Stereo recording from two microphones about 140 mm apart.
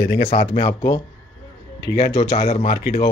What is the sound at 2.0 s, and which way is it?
Speech, 40° left (ahead or behind).